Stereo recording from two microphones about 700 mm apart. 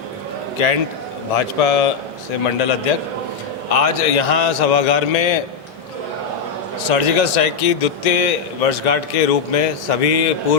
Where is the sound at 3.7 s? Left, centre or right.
Left.